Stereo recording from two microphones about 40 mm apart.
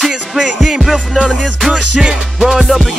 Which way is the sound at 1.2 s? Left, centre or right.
Centre.